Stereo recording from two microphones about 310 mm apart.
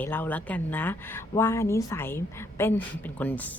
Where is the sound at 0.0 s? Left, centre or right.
Centre.